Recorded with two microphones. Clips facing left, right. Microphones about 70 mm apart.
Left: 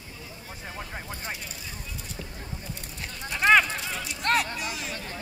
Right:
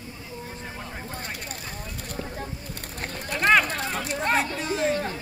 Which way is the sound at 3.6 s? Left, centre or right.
Right.